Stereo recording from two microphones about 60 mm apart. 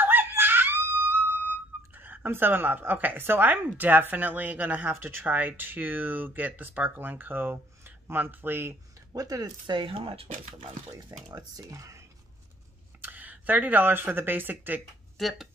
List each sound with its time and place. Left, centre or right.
0.0 s screaming: right
2.0 s a woman's voice: right
9.1 s speech: right
10.9 s speech: right
13.0 s speech: right
15.1 s speech: centre